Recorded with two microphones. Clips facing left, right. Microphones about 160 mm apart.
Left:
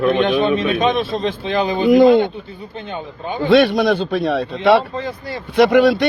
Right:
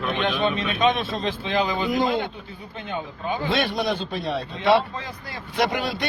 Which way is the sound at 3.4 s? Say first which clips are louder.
Left 12 dB; 65° left (ahead or behind).